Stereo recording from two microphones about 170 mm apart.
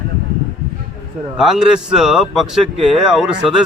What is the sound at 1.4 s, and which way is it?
A man's voice, 5° right (ahead or behind).